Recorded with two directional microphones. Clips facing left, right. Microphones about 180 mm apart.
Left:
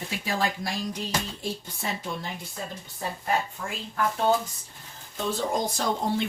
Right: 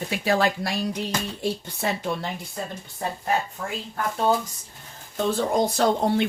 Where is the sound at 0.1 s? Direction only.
65° right (ahead or behind).